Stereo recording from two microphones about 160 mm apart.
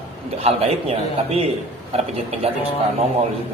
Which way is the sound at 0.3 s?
40° right (ahead or behind).